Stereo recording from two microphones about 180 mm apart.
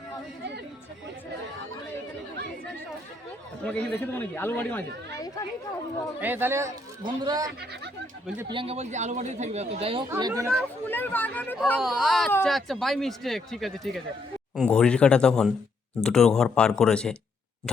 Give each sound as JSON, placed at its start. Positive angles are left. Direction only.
{"t": 3.6, "sound": "speech", "side_deg": 5}
{"t": 6.1, "sound": "a man's voice", "side_deg": -10}
{"t": 10.1, "sound": "speech", "side_deg": -20}
{"t": 10.8, "sound": "speech", "side_deg": 10}
{"t": 11.8, "sound": "speech", "side_deg": 0}